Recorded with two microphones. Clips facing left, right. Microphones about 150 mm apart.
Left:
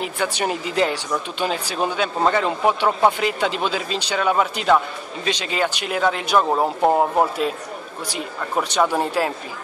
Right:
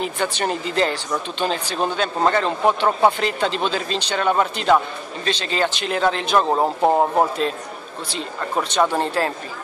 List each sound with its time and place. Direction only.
0.0 s a man's voice: 10° left (ahead or behind)